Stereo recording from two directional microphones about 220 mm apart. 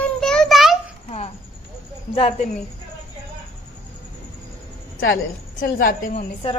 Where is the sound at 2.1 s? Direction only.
25° left (ahead or behind).